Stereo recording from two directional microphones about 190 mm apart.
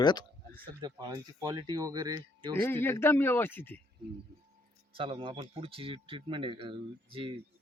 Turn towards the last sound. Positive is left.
turn(degrees=-30)  # may be behind; listen again after turning